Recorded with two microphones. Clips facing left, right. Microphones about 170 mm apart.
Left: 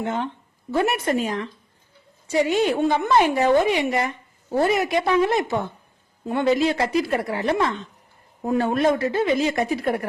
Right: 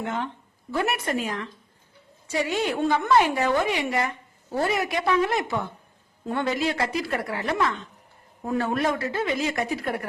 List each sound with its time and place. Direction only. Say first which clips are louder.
0.0 s speech: left 4 dB; 20° left (ahead or behind)
6.5 s speech: left 8 dB; 25° left (ahead or behind)